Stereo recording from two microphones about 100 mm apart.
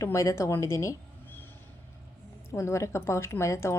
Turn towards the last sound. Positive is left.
turn(degrees=30)  # may be behind; listen again after turning